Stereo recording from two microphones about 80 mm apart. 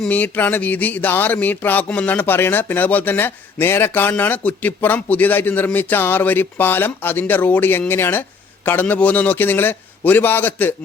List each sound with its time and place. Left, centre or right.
0.1 s speech: centre